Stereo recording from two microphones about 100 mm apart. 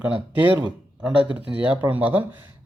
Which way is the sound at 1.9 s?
15° right (ahead or behind).